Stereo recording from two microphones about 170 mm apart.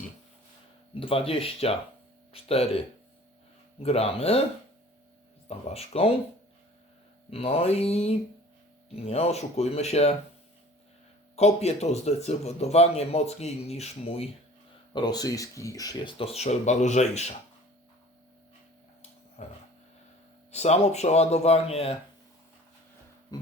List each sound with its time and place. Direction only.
0.9 s a man's voice: 30° left (ahead or behind)
3.8 s a man's voice: 35° left (ahead or behind)
5.5 s a man's voice: 35° left (ahead or behind)
7.3 s a man's voice: 35° left (ahead or behind)
11.3 s a man's voice: 40° left (ahead or behind)
14.9 s speech: 25° left (ahead or behind); by 17.3 s 40° left (ahead or behind)
19.4 s a man's voice: 40° left (ahead or behind)
23.3 s music: 20° left (ahead or behind)